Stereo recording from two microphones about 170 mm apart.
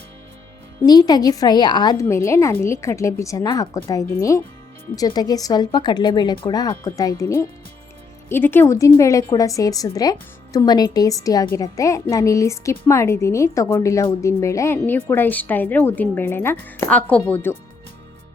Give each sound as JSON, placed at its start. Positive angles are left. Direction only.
{"t": 0.9, "sound": "a woman's voice", "side_deg": 25}